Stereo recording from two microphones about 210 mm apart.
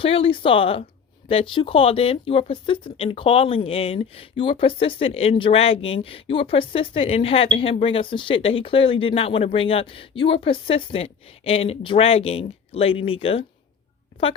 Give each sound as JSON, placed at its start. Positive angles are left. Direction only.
{"t": 0.0, "sound": "speech", "side_deg": 25}